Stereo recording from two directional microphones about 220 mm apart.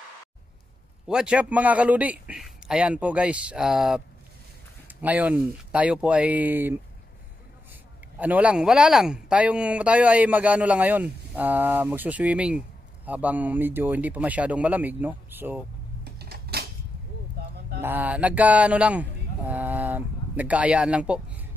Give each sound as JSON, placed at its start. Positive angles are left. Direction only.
{"t": 1.0, "sound": "a man's voice", "side_deg": -5}
{"t": 8.2, "sound": "speech", "side_deg": -5}
{"t": 16.0, "sound": "typewriter", "side_deg": -45}
{"t": 17.8, "sound": "speech", "side_deg": -10}